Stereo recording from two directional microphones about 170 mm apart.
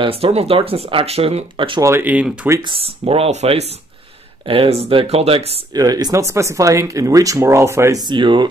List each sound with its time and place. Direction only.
0.0 s speech: 35° right (ahead or behind)
1.8 s speech: 15° right (ahead or behind)
2.6 s speech: 30° right (ahead or behind)
5.7 s speech: 20° right (ahead or behind)